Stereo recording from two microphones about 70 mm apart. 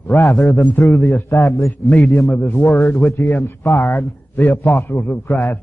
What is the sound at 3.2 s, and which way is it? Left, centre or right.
Speech, left.